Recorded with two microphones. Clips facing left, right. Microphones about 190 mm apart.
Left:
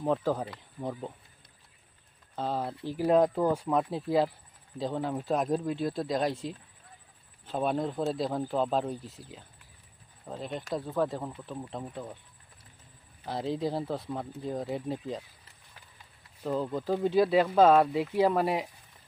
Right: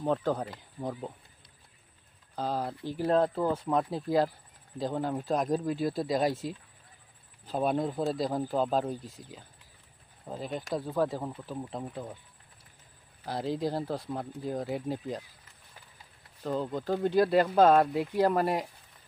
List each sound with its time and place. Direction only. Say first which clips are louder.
0.0 s speech: even; centre (ahead or behind)
2.3 s speech: even; centre (ahead or behind)
3.1 s speech: left 2 dB; 15° left (ahead or behind); by 12.1 s 5° right (ahead or behind)
13.2 s speech: even; centre (ahead or behind)
16.4 s speech: left 1 dB; 5° left (ahead or behind)